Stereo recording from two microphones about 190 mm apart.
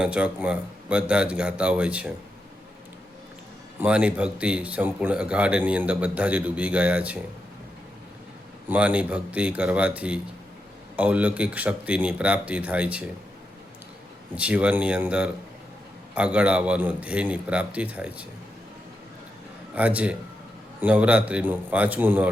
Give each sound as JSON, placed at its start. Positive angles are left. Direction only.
{"t": 0.0, "sound": "a man's voice", "side_deg": -5}
{"t": 3.8, "sound": "speech", "side_deg": -5}
{"t": 8.7, "sound": "speech", "side_deg": -5}
{"t": 14.3, "sound": "speech", "side_deg": -5}
{"t": 19.7, "sound": "speech", "side_deg": -5}